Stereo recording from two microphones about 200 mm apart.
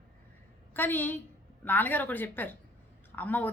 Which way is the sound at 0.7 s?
10° left (ahead or behind).